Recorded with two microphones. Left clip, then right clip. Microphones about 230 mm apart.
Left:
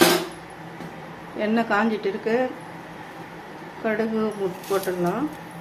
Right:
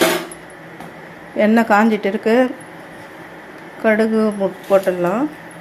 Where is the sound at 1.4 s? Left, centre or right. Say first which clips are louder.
Right 9 dB; right.